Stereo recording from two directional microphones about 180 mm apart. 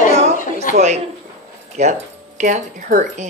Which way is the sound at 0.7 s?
40° right (ahead or behind).